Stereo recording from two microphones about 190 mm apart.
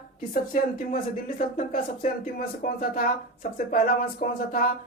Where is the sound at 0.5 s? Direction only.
45° left (ahead or behind).